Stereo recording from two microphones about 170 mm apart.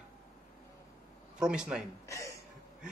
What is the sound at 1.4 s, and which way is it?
Speech, 5° right (ahead or behind).